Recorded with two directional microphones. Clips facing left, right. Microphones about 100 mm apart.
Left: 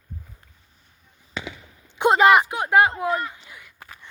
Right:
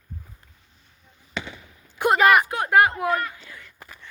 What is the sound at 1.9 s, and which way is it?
Speech, 25° left (ahead or behind).